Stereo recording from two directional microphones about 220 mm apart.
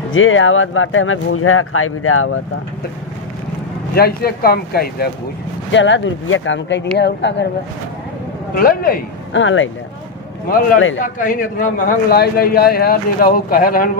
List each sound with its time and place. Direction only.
0.1 s speech: 65° left (ahead or behind)
3.9 s speech: 45° left (ahead or behind)
5.7 s speech: 55° left (ahead or behind)
8.5 s a man's voice: 40° left (ahead or behind)
9.3 s speech: 60° left (ahead or behind)
11.1 s a man's voice: 35° left (ahead or behind)